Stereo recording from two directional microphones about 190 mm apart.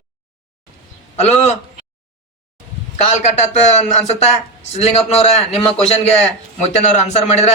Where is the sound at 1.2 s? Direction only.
35° left (ahead or behind).